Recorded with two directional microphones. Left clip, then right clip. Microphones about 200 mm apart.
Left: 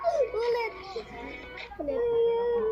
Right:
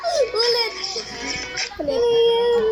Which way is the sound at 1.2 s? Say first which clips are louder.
Right 14 dB; 35° right (ahead or behind).